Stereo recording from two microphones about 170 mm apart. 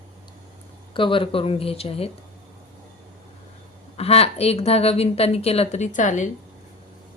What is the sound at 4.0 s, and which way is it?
Speech, 35° left (ahead or behind).